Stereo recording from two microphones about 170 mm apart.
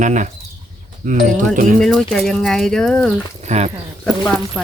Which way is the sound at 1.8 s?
Centre (ahead or behind).